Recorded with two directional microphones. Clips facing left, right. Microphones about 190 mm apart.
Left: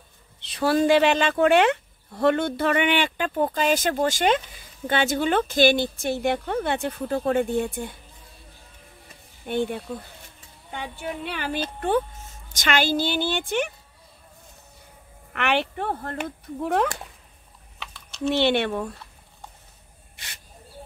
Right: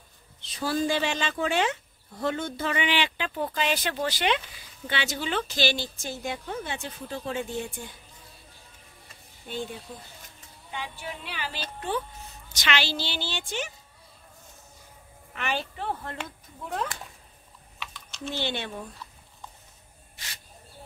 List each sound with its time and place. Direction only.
0.4 s speech: 65° left (ahead or behind)
9.5 s speech: 60° left (ahead or behind)
15.3 s speech: 70° left (ahead or behind); by 16.3 s 50° left (ahead or behind)
16.6 s speech: 70° left (ahead or behind)
18.3 s speech: 70° left (ahead or behind)